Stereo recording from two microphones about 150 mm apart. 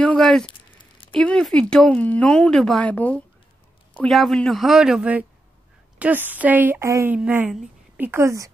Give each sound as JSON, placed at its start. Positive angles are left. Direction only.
{"t": 0.0, "sound": "a sound", "side_deg": 5}
{"t": 1.1, "sound": "a woman's voice", "side_deg": 5}
{"t": 7.2, "sound": "a woman's voice", "side_deg": -10}
{"t": 8.1, "sound": "speech", "side_deg": -20}